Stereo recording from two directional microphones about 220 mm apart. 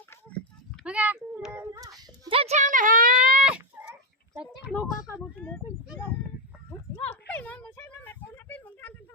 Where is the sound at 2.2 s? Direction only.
25° right (ahead or behind).